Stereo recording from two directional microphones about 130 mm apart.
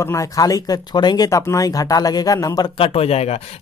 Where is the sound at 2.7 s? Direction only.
45° left (ahead or behind).